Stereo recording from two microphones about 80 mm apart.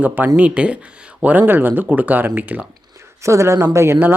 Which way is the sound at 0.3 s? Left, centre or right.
Centre.